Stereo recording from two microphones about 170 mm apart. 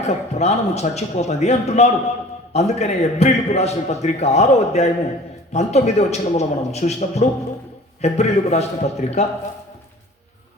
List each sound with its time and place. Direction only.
0.0 s a man's voice: 40° left (ahead or behind)